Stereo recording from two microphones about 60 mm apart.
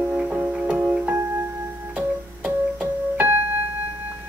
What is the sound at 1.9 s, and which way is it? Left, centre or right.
Keyboard, right.